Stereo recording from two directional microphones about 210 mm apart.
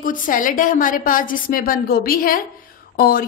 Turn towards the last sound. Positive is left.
turn(degrees=45)  # may be behind; listen again after turning